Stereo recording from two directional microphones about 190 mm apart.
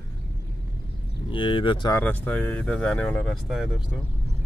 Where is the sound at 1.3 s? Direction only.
25° left (ahead or behind).